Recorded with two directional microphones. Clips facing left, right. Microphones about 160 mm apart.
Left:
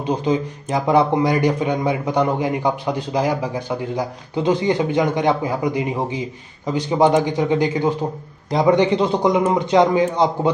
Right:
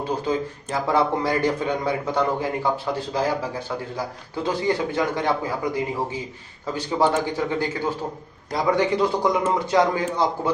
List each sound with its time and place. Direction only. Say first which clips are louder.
0.0 s a man's voice: left 4 dB; 20° left (ahead or behind)